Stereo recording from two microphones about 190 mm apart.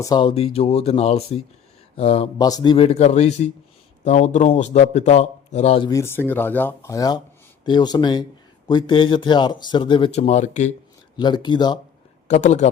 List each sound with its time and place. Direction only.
0.0 s a man's voice: 20° left (ahead or behind)
2.4 s a man's voice: 20° left (ahead or behind)
5.9 s speech: 15° left (ahead or behind); by 10.7 s 40° left (ahead or behind)
11.2 s speech: 25° left (ahead or behind)
12.3 s a man's voice: 40° left (ahead or behind)